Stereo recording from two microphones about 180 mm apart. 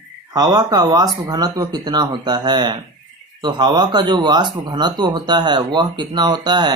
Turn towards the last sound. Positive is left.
turn(degrees=-25)  # may be behind; listen again after turning